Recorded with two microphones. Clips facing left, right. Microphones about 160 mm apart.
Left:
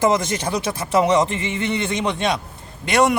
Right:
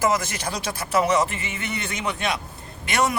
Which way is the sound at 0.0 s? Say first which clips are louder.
Left 5 dB; 25° left (ahead or behind).